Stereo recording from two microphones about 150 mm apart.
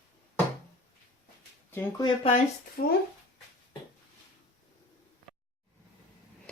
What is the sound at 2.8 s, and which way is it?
Speech, 70° left (ahead or behind).